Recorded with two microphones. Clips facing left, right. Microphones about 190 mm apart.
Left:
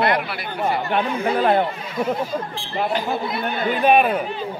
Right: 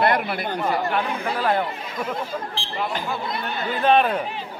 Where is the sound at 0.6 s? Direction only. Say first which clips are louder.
Left 4 dB; 20° left (ahead or behind).